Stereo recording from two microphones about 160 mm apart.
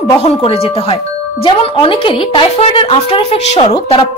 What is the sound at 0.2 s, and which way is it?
Speech, 35° left (ahead or behind).